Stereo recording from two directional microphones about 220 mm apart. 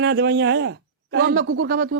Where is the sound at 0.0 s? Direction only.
50° right (ahead or behind).